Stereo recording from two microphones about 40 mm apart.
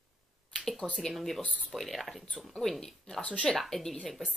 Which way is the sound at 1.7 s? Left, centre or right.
Centre.